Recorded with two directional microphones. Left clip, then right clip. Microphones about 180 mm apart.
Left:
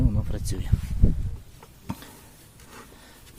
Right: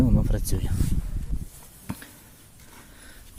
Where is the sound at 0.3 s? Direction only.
35° right (ahead or behind).